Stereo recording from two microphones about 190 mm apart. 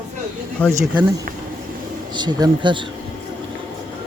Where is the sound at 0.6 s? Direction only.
10° left (ahead or behind).